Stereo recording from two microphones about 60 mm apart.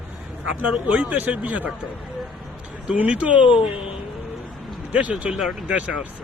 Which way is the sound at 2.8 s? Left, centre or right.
Right.